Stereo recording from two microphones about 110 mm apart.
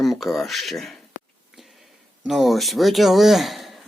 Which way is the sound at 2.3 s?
Centre (ahead or behind).